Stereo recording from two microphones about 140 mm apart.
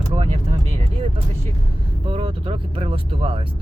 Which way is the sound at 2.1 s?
40° right (ahead or behind).